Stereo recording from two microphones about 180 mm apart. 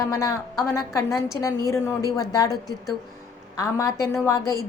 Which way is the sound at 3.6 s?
20° left (ahead or behind).